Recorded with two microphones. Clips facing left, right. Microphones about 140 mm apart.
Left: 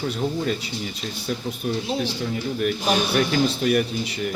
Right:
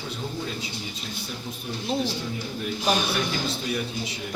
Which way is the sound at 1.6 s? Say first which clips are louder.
Left 10 dB; 65° left (ahead or behind).